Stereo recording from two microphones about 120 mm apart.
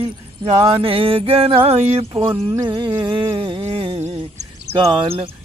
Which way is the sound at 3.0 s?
40° right (ahead or behind).